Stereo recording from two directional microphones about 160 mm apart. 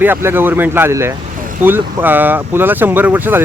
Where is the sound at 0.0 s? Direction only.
15° right (ahead or behind).